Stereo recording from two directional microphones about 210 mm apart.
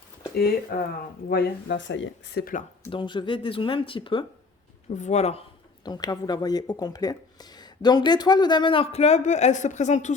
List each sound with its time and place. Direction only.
0.3 s speech: 50° left (ahead or behind)
2.9 s speech: 20° left (ahead or behind)